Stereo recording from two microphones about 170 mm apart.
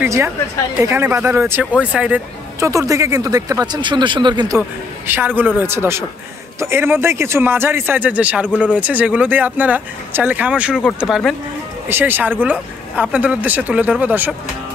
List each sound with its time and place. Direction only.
0.0 s a woman's voice: 15° right (ahead or behind)
5.0 s speech: 10° right (ahead or behind)